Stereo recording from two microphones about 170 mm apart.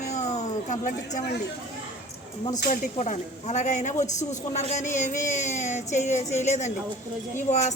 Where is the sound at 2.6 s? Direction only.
45° left (ahead or behind).